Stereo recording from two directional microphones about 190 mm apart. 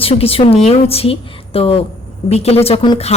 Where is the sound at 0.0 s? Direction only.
30° left (ahead or behind).